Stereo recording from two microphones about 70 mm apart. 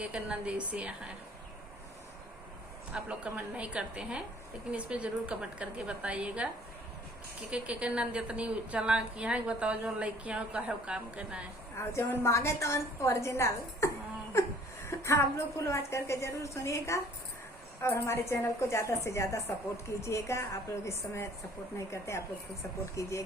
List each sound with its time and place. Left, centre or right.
0.0 s a woman's voice: centre
2.9 s a woman's voice: centre
7.5 s a woman's voice: centre
11.8 s a woman's voice: left